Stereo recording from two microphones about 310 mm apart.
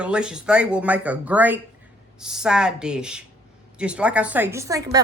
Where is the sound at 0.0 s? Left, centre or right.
Centre.